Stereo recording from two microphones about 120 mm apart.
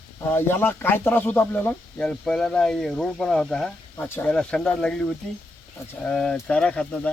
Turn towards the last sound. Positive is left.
turn(degrees=10)  # may be behind; listen again after turning